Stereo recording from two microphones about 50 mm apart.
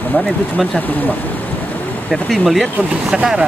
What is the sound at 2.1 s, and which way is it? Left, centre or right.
Speech, centre.